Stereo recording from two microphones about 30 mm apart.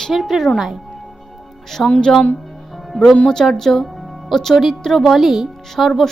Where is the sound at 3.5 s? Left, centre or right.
Centre.